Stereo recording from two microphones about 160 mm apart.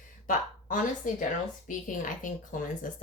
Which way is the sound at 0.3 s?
55° left (ahead or behind).